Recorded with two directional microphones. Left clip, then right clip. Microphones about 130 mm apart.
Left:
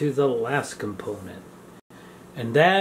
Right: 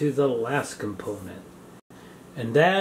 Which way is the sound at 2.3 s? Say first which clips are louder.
Left 2 dB; 10° left (ahead or behind).